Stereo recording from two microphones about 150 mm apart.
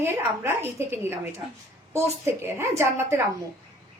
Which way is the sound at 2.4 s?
15° right (ahead or behind).